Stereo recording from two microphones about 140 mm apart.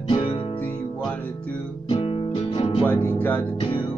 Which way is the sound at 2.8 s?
15° left (ahead or behind).